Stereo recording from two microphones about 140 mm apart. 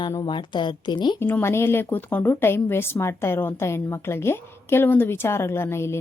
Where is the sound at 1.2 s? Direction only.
15° left (ahead or behind).